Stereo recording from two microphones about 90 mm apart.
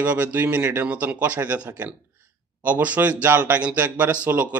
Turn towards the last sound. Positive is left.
turn(degrees=-15)  # may be behind; listen again after turning